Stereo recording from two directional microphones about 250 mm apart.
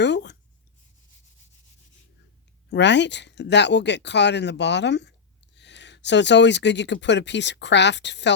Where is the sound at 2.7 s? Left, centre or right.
Left.